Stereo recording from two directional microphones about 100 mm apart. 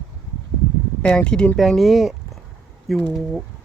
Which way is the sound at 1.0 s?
10° left (ahead or behind).